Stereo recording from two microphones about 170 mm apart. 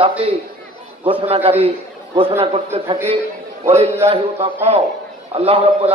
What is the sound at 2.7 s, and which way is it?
A man's voice, 35° right (ahead or behind).